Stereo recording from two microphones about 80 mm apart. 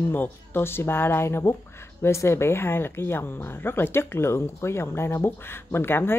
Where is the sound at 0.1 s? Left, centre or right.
Left.